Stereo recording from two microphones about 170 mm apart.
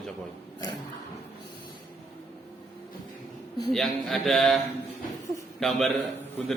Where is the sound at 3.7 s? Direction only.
Centre (ahead or behind).